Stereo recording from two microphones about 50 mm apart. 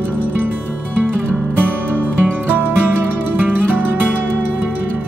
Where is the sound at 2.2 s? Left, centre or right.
Right.